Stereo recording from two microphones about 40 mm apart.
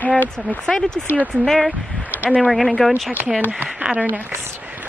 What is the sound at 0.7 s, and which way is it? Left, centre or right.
Speech, centre.